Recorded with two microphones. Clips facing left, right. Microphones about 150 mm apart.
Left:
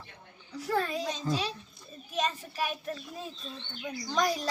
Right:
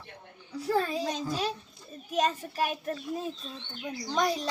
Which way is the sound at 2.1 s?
45° right (ahead or behind).